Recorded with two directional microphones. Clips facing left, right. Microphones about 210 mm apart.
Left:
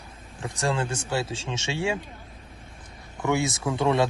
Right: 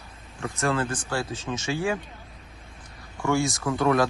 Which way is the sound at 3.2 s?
20° left (ahead or behind).